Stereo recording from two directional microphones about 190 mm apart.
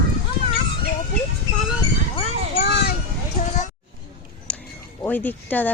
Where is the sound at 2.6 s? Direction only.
60° left (ahead or behind).